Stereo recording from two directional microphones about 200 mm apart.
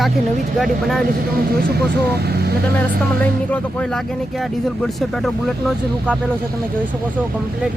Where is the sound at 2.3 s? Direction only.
55° right (ahead or behind).